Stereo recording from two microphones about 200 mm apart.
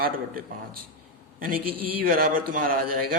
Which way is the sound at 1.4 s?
45° right (ahead or behind).